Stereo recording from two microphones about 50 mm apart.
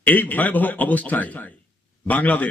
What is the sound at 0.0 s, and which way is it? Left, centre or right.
A man's voice, left.